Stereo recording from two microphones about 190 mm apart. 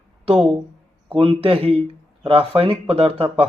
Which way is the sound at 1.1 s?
30° right (ahead or behind).